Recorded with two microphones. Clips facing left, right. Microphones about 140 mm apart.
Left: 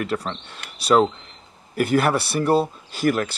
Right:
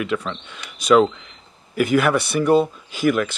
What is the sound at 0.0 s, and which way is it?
Speech, 35° left (ahead or behind).